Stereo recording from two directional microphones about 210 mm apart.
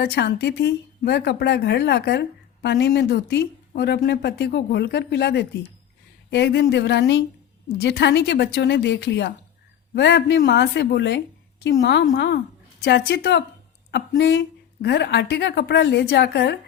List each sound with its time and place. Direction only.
0.0 s speech: 50° left (ahead or behind)